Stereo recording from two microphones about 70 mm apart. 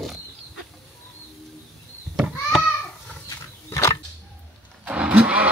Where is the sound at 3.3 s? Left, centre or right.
Left.